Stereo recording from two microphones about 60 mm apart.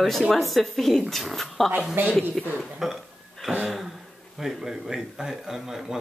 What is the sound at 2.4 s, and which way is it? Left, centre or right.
Speech, centre.